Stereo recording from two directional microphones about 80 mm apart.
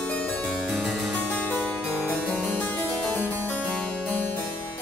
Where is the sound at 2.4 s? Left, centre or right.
Left.